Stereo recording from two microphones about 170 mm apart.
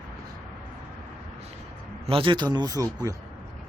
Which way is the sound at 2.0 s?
30° right (ahead or behind).